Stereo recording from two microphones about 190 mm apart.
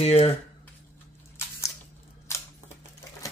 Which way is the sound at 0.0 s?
35° left (ahead or behind).